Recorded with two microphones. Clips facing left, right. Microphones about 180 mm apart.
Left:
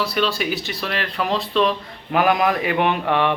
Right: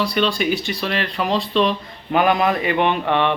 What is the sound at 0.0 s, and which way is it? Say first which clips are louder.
Speech: right 2 dB; 5° left (ahead or behind).